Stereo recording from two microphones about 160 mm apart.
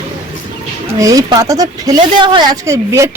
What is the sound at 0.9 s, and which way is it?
Speech, 20° right (ahead or behind).